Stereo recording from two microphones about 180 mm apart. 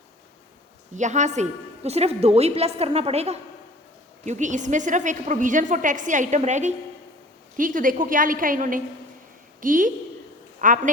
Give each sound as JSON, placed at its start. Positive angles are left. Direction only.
{"t": 0.9, "sound": "a woman's voice", "side_deg": -40}